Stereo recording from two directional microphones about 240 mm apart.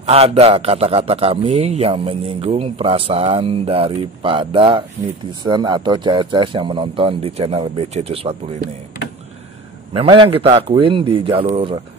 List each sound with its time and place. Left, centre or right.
0.0 s a man's voice: right
9.9 s a man's voice: right